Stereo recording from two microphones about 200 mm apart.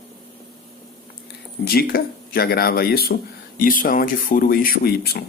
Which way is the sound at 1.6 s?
50° left (ahead or behind).